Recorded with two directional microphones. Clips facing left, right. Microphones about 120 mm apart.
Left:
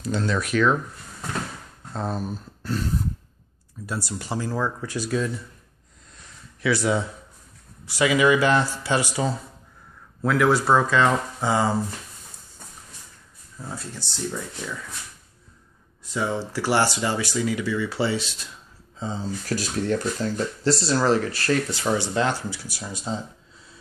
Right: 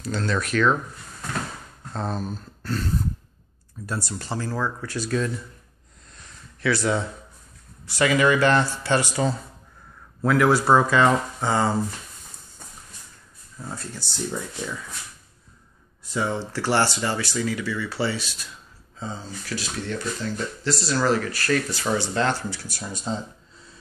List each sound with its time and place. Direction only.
0.0 s speech: 15° left (ahead or behind)
1.9 s speech: 10° left (ahead or behind)
6.6 s speech: 10° left (ahead or behind); by 11.4 s 5° right (ahead or behind)
11.4 s speech: 10° left (ahead or behind)
16.0 s speech: centre (ahead or behind); by 19.2 s 20° left (ahead or behind)
19.4 s speech: 45° left (ahead or behind); by 23.2 s 5° left (ahead or behind)